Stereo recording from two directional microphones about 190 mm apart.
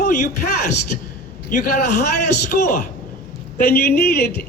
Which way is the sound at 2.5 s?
45° left (ahead or behind).